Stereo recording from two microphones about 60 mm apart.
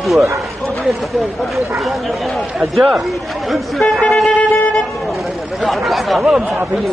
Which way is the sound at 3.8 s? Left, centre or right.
Centre.